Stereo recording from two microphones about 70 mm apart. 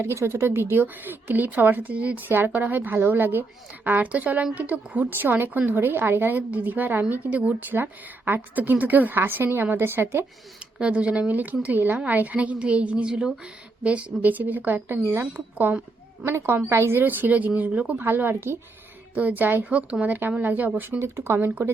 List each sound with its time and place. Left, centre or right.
0.0 s a woman's voice: right
10.8 s a woman's voice: centre
16.2 s a woman's voice: right